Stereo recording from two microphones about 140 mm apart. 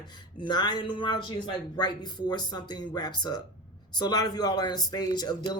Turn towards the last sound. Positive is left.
turn(degrees=30)  # may be behind; listen again after turning